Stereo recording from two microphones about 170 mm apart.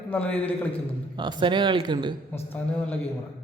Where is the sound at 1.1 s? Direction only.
25° right (ahead or behind).